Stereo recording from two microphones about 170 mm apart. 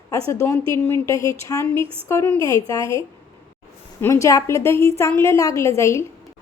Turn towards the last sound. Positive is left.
turn(degrees=15)  # may be behind; listen again after turning